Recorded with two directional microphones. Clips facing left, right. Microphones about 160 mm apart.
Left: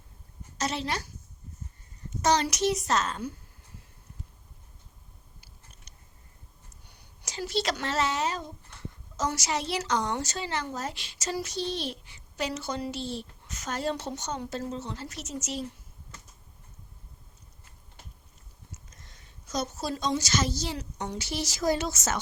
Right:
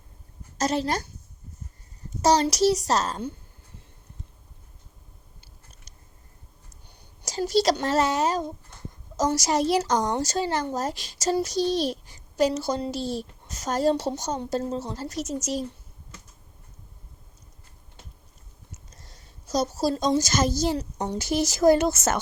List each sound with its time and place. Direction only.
0.6 s speech: 40° right (ahead or behind)
2.2 s a woman's voice: 35° right (ahead or behind)
7.3 s a woman's voice: 40° right (ahead or behind)
18.9 s a woman's voice: 35° right (ahead or behind); by 22.2 s 55° right (ahead or behind)